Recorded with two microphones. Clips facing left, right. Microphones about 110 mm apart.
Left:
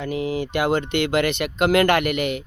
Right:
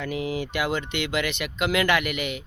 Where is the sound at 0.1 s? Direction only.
35° left (ahead or behind).